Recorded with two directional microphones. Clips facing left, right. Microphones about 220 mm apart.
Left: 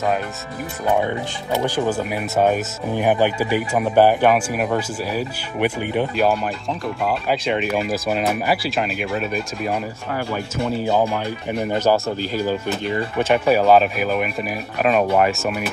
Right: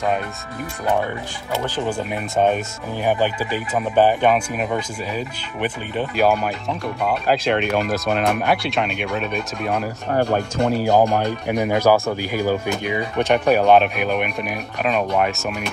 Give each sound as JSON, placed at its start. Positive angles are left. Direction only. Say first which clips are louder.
{"t": 1.9, "sound": "speech", "louder": "left 2 dB", "side_deg": 5}
{"t": 10.1, "sound": "speech", "louder": "right 6 dB", "side_deg": -55}
{"t": 11.4, "sound": "speech", "louder": "right 2 dB", "side_deg": -70}
{"t": 11.8, "sound": "speech", "louder": "right 2 dB", "side_deg": -15}
{"t": 13.2, "sound": "speech", "louder": "even", "side_deg": 0}